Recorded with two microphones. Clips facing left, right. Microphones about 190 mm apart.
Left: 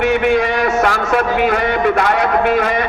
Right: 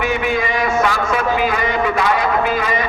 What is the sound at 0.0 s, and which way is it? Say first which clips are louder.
A man's voice: left 5 dB; 70° left (ahead or behind).